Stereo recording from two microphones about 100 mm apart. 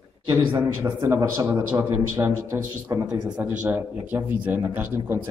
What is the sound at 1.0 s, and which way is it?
A man's voice, 30° right (ahead or behind).